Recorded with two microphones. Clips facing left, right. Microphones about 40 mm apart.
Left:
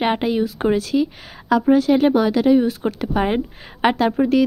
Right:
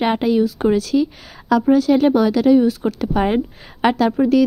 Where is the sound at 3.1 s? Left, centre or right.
Centre.